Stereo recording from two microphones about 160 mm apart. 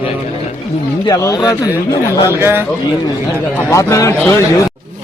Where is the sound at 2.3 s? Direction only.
15° right (ahead or behind).